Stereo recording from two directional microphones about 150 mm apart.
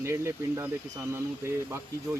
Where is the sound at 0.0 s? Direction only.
15° right (ahead or behind).